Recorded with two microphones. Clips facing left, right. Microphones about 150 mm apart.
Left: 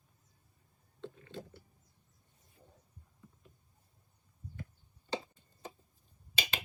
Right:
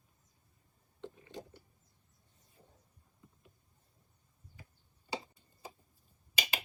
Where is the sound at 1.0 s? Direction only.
15° right (ahead or behind).